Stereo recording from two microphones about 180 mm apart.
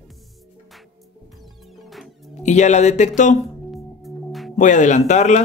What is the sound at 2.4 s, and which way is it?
Speech, 40° left (ahead or behind).